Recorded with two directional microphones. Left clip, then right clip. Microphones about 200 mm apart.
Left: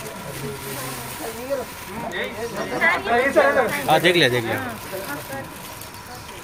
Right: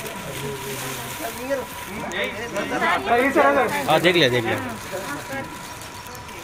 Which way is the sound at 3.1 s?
45° right (ahead or behind).